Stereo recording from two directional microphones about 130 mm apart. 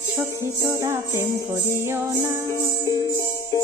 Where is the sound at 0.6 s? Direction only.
20° right (ahead or behind).